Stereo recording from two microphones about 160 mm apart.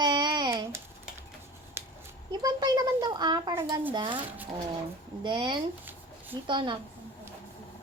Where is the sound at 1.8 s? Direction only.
15° right (ahead or behind).